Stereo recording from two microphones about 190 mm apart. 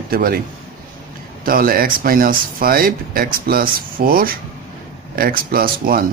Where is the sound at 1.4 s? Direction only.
50° right (ahead or behind).